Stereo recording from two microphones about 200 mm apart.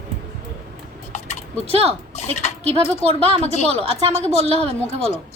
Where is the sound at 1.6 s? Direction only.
30° right (ahead or behind).